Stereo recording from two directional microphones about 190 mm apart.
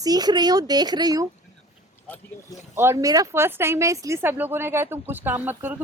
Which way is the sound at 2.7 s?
15° right (ahead or behind).